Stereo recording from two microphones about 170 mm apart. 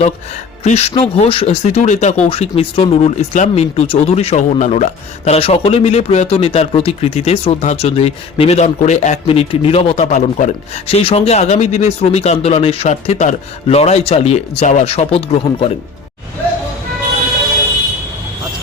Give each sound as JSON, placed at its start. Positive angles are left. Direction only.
{"t": 0.6, "sound": "speech", "side_deg": 35}